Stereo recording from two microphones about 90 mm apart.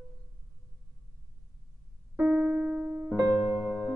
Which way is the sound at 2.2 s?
15° right (ahead or behind).